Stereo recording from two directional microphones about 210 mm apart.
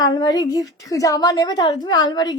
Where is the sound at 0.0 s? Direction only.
20° left (ahead or behind).